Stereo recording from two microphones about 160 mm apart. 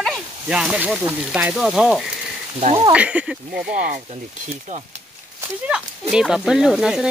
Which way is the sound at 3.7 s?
65° right (ahead or behind).